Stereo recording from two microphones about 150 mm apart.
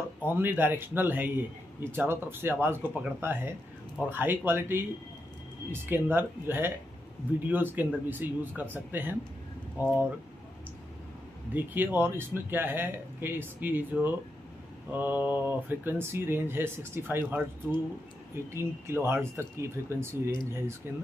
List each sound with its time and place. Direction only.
0.2 s speech: 15° right (ahead or behind)
11.5 s speech: 10° right (ahead or behind)
18.5 s speech: 15° right (ahead or behind)